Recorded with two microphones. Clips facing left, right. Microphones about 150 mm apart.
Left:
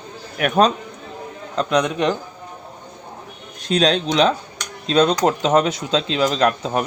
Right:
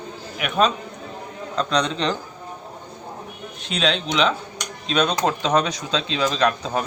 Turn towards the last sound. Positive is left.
turn(degrees=25)  # may be behind; listen again after turning